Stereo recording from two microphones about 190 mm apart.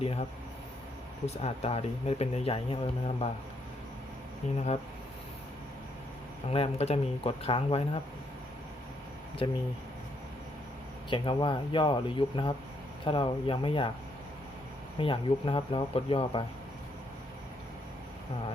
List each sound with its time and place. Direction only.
0.0 s speech: 30° left (ahead or behind)
1.3 s speech: 35° left (ahead or behind)
4.5 s speech: 35° left (ahead or behind)
6.5 s speech: 35° left (ahead or behind)
9.4 s speech: 30° left (ahead or behind)
11.1 s speech: 25° left (ahead or behind)
14.9 s speech: 25° left (ahead or behind)